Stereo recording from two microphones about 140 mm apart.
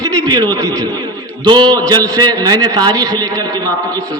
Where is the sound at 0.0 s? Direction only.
25° right (ahead or behind).